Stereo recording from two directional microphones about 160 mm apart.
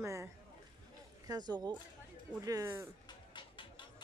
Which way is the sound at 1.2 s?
25° right (ahead or behind).